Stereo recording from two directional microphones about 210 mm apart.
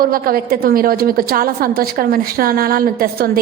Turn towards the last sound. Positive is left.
turn(degrees=-45)  # may be behind; listen again after turning